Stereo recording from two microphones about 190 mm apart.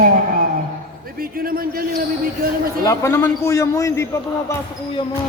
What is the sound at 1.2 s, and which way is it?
Speech, 50° right (ahead or behind).